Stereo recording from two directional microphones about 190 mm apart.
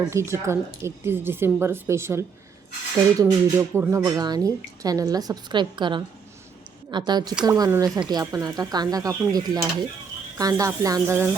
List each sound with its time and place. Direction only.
0.1 s speech: 15° right (ahead or behind)